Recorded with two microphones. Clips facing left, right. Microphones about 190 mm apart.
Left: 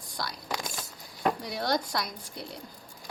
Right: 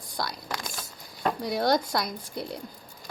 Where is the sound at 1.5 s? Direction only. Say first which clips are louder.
Right 10 dB; 50° right (ahead or behind).